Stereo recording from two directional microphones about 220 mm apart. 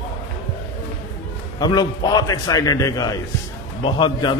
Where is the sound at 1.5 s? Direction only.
20° left (ahead or behind).